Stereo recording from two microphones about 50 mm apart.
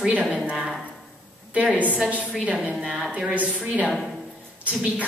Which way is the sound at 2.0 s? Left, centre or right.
Right.